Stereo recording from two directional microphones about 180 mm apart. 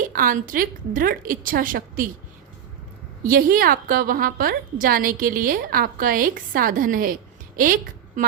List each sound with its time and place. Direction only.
0.0 s a woman's voice: 50° right (ahead or behind)
3.2 s a woman's voice: 55° right (ahead or behind)